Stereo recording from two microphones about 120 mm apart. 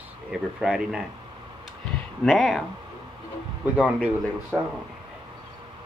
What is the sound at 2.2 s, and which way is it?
Speech, centre (ahead or behind).